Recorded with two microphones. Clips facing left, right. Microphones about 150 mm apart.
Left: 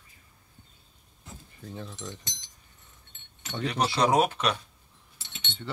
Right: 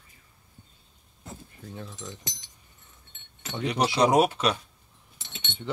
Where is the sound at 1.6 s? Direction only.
Centre (ahead or behind).